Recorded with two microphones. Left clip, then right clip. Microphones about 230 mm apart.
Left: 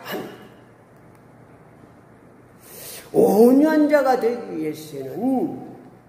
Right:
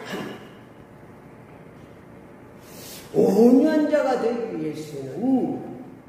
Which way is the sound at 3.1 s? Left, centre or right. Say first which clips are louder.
Left 3 dB; left.